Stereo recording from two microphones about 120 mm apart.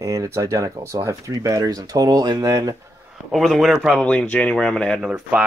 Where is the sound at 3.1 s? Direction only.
Centre (ahead or behind).